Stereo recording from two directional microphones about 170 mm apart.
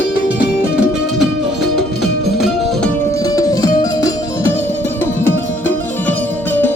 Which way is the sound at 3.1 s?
20° left (ahead or behind).